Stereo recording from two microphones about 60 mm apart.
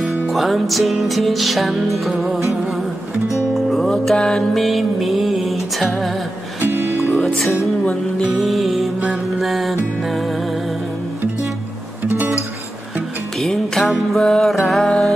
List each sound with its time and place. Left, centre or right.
0.3 s music: centre
3.5 s music: centre
6.6 s music: right
8.4 s music: centre
13.4 s music: centre